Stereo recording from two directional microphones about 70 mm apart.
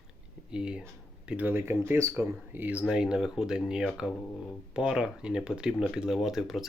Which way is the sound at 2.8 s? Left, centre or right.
Centre.